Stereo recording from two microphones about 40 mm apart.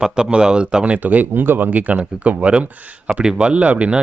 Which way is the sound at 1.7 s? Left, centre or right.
Right.